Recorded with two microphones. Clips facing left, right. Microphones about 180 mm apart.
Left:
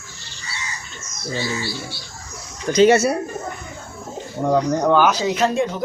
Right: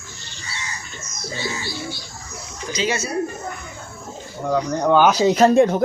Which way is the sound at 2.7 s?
60° left (ahead or behind).